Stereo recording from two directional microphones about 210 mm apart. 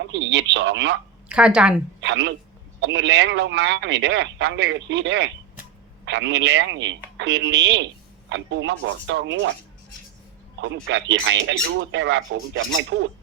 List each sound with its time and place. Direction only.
0.1 s speech: 55° right (ahead or behind)
1.3 s a woman's voice: 5° right (ahead or behind)
2.0 s speech: 60° right (ahead or behind)
10.8 s speech: 60° right (ahead or behind)